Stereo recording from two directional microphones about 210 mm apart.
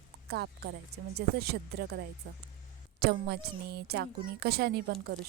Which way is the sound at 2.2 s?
70° right (ahead or behind).